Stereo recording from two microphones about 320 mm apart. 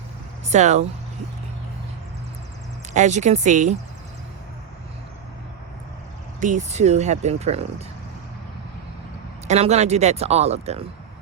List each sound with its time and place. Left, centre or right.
0.4 s speech: right
2.9 s speech: right
6.4 s speech: right
9.5 s speech: right